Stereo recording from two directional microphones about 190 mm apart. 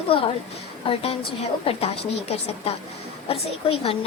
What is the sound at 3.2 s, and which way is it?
Speech, 30° left (ahead or behind).